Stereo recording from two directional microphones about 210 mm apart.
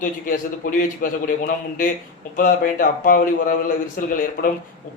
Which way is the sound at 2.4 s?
45° left (ahead or behind).